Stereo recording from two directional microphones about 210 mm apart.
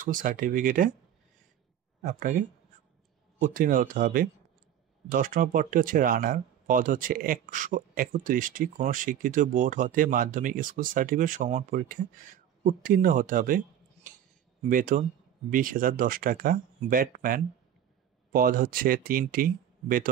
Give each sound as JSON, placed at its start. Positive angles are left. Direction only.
{"t": 0.0, "sound": "speech", "side_deg": -40}
{"t": 2.0, "sound": "speech", "side_deg": -40}